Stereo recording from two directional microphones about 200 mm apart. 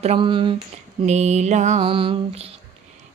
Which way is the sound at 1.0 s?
35° right (ahead or behind).